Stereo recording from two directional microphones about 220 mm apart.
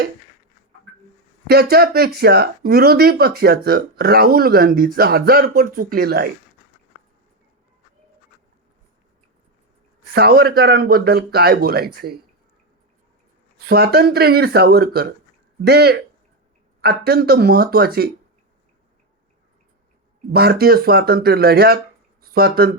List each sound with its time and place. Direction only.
1.5 s speech: 45° right (ahead or behind)
10.2 s speech: 45° right (ahead or behind)
13.7 s speech: 45° right (ahead or behind)
20.3 s speech: 45° right (ahead or behind)